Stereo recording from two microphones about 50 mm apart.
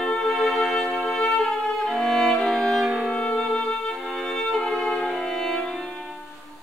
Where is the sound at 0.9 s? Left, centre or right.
Centre.